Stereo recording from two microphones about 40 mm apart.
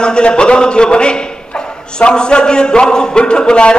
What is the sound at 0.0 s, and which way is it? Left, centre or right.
A man's voice, left.